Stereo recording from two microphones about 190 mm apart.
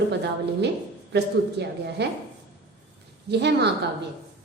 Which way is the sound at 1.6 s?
60° right (ahead or behind).